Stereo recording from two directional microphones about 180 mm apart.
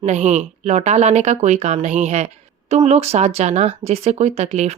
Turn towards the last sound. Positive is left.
turn(degrees=-35)  # may be behind; listen again after turning